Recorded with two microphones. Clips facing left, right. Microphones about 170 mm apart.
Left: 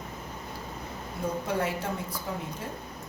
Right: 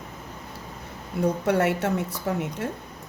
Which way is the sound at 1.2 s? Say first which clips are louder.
Right 7 dB; 75° right (ahead or behind).